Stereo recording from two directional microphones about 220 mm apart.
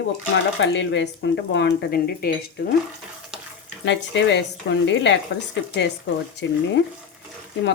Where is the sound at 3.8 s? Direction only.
55° left (ahead or behind).